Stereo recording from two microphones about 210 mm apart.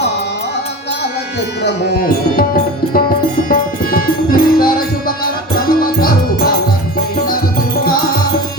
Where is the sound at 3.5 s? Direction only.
45° left (ahead or behind).